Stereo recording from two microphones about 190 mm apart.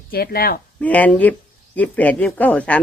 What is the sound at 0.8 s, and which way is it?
Speech, 5° left (ahead or behind).